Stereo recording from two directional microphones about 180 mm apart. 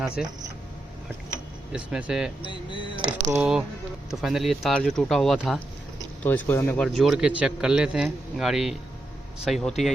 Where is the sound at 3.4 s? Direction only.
5° right (ahead or behind); by 6.8 s 15° left (ahead or behind).